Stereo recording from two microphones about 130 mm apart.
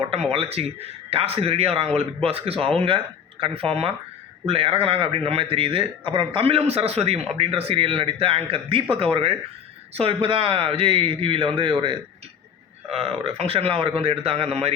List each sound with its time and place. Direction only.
0.3 s a man's voice: 50° right (ahead or behind)
12.9 s a man's voice: 50° right (ahead or behind)